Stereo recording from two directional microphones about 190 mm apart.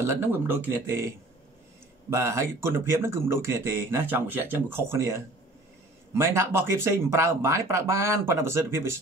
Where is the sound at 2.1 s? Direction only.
15° right (ahead or behind).